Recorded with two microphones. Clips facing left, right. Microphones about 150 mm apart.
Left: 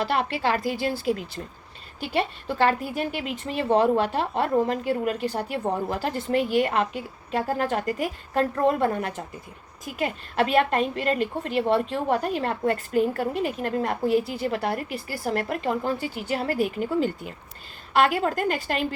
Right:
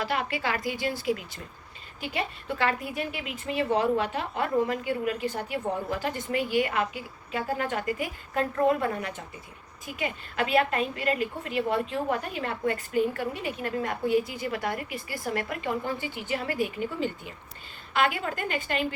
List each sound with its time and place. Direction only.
0.0 s a woman's voice: 35° left (ahead or behind)
7.3 s a woman's voice: 40° left (ahead or behind)